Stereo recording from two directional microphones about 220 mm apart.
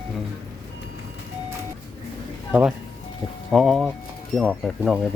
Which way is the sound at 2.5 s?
5° right (ahead or behind).